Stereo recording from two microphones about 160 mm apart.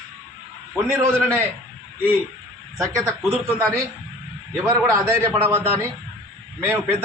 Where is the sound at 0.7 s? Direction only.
15° right (ahead or behind).